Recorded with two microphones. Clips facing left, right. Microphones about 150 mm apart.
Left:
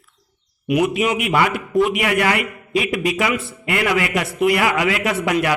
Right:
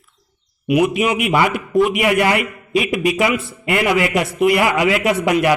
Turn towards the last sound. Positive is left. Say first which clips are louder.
# right 3 dB
turn(degrees=-20)  # may be behind; listen again after turning